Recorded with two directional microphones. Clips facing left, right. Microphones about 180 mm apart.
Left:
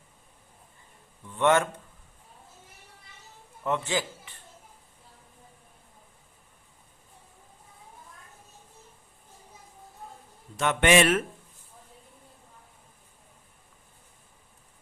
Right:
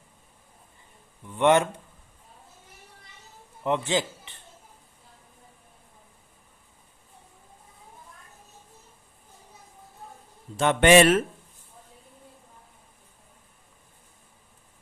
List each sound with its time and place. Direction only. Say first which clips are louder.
1.3 s a man's voice: right 3 dB; 15° right (ahead or behind)
3.6 s a man's voice: right 3 dB; 20° right (ahead or behind)
10.6 s speech: right 5 dB; 35° right (ahead or behind)